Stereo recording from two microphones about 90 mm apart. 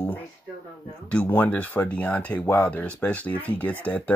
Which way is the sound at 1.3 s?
20° left (ahead or behind).